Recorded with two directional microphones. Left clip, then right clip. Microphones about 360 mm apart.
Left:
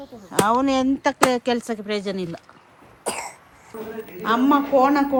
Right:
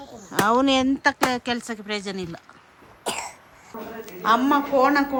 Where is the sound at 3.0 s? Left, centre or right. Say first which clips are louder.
Left 1 dB; centre.